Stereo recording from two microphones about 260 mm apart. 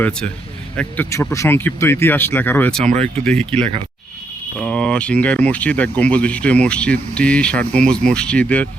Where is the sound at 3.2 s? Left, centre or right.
Centre.